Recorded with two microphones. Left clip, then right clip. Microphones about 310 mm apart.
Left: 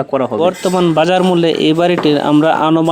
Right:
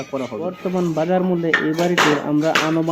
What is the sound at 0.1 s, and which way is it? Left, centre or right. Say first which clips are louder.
Speech: left 12 dB; left.